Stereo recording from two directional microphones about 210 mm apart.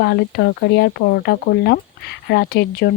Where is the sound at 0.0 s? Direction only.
50° left (ahead or behind).